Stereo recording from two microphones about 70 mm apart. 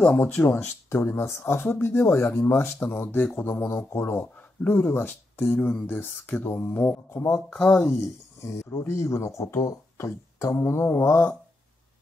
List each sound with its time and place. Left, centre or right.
0.2 s speech: left